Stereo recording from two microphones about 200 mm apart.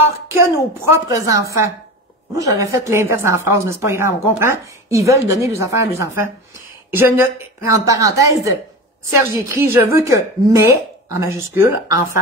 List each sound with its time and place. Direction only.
0.3 s a woman's voice: 10° right (ahead or behind)